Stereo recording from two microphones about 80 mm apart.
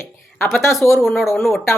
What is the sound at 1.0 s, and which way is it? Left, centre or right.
Speech, centre.